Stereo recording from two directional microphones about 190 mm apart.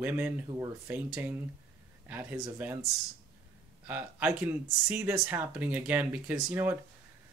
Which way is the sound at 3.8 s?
10° right (ahead or behind).